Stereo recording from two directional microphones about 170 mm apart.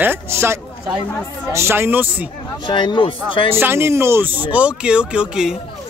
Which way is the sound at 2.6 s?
25° left (ahead or behind).